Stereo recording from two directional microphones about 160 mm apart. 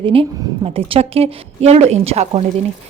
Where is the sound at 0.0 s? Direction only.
35° right (ahead or behind).